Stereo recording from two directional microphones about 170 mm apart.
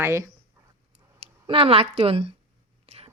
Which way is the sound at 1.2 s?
35° right (ahead or behind).